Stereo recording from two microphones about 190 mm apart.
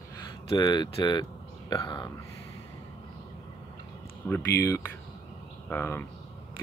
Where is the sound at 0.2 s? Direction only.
20° left (ahead or behind).